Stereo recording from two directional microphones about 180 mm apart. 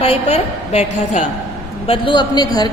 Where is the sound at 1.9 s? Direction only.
25° left (ahead or behind).